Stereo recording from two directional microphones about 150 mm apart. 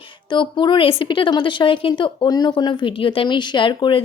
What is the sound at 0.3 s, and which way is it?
A woman's voice, 30° left (ahead or behind).